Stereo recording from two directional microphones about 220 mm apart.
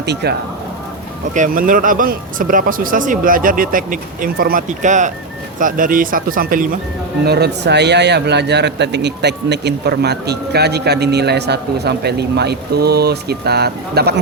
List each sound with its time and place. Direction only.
0.0 s a man's voice: 50° right (ahead or behind)
1.3 s a man's voice: 35° right (ahead or behind)